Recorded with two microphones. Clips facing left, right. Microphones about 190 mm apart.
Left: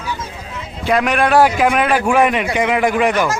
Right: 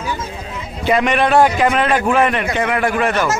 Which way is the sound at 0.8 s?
Centre (ahead or behind).